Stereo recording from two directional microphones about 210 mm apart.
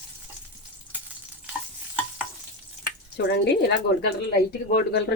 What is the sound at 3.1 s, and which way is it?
Speech, 50° left (ahead or behind).